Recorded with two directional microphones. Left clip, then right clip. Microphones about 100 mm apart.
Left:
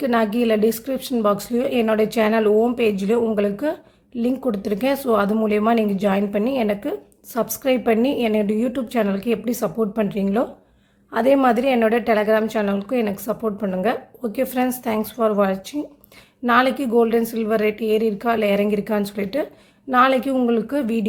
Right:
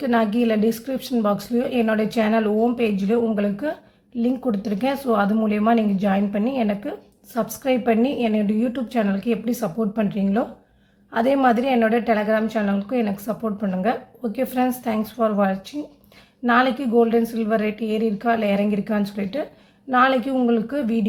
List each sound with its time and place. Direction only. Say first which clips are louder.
0.0 s a woman's voice: left 1 dB; 35° left (ahead or behind)